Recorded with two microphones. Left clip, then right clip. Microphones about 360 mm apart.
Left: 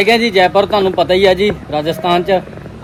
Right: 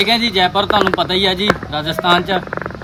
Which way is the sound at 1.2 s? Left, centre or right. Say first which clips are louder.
Left 5 dB; left.